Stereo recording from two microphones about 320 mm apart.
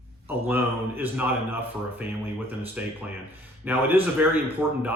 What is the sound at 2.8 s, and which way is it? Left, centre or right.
Speech, centre.